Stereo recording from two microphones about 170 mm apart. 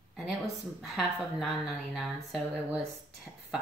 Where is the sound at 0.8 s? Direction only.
Centre (ahead or behind).